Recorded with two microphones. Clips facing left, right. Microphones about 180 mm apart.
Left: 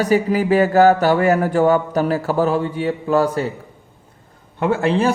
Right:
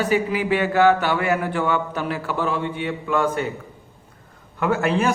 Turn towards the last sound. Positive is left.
turn(degrees=30)  # may be behind; listen again after turning